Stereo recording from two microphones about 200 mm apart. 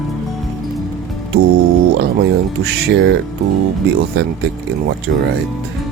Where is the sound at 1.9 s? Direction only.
55° right (ahead or behind).